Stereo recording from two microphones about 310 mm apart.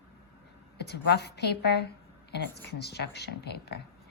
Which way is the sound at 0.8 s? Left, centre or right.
Left.